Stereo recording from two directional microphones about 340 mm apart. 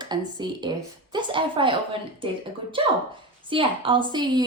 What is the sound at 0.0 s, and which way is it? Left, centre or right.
A woman's voice, centre.